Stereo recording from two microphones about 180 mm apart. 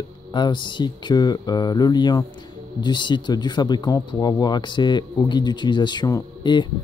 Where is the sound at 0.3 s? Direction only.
25° left (ahead or behind).